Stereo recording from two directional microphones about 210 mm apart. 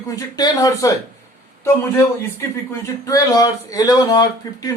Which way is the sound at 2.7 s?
15° left (ahead or behind).